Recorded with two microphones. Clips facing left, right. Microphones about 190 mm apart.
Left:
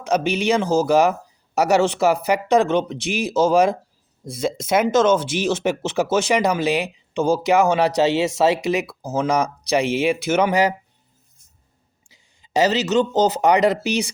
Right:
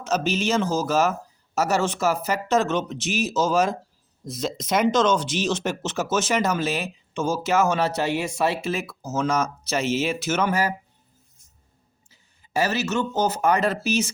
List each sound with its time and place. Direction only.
0.0 s speech: 15° left (ahead or behind)
8.0 s speech: 90° left
8.6 s speech: 15° left (ahead or behind)
12.0 s speech: 15° left (ahead or behind)